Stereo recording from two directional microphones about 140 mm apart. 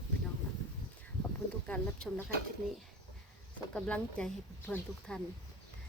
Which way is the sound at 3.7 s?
10° left (ahead or behind).